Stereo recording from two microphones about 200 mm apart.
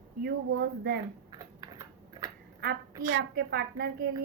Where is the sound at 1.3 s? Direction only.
20° right (ahead or behind).